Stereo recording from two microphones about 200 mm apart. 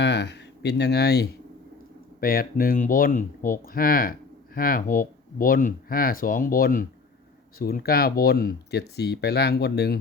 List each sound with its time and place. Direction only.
0.0 s speech: 60° left (ahead or behind)